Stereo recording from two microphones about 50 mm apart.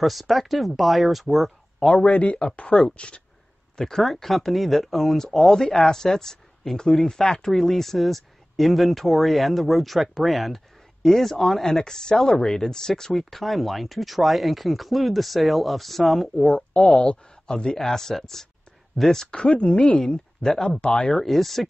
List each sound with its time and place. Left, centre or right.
0.0 s speech: centre
2.0 s speech: left
3.7 s speech: centre
16.5 s speech: left; by 19.2 s centre
19.3 s speech: left
20.0 s speech: centre
21.1 s speech: centre